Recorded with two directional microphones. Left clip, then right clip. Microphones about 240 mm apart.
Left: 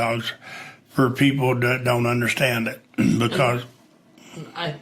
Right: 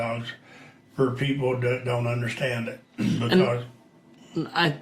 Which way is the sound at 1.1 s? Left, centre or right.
Left.